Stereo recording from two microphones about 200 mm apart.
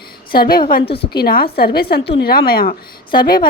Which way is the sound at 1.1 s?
50° left (ahead or behind).